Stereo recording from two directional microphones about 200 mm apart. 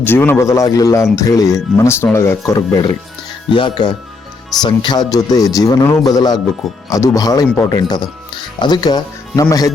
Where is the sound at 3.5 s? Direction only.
25° left (ahead or behind).